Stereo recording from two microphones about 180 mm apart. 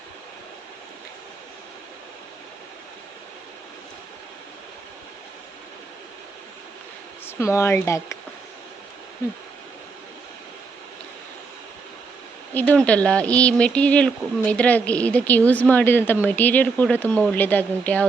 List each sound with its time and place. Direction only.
7.3 s speech: 15° left (ahead or behind)
12.5 s speech: 10° left (ahead or behind)